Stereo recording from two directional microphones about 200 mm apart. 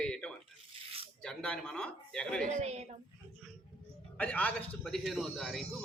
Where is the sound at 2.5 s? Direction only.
30° right (ahead or behind).